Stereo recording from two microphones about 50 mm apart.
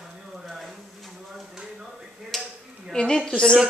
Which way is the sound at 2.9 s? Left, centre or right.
Centre.